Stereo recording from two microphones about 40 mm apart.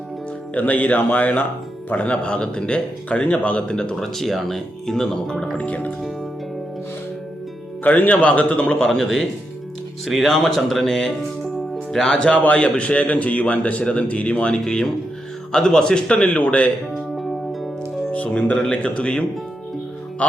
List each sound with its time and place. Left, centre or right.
0.5 s a man's voice: left
2.2 s a man's voice: left
3.9 s speech: centre
5.5 s a man's voice: left
7.9 s a man's voice: left
8.9 s speech: centre
11.5 s music: centre
12.0 s speech: centre
12.3 s a man's voice: left
17.1 s music: centre
18.1 s speech: left
18.6 s a man's voice: left